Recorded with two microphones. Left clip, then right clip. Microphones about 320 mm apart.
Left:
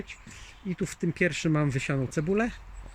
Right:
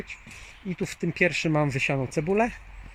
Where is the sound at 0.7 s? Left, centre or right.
Centre.